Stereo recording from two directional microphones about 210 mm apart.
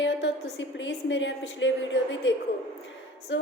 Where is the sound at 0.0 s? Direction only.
60° left (ahead or behind).